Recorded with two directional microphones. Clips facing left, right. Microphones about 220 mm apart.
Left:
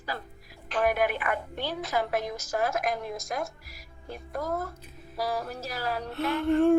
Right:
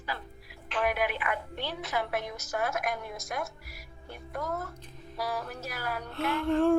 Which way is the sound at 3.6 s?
90° left.